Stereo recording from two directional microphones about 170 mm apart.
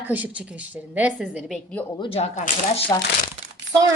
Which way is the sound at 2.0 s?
35° left (ahead or behind).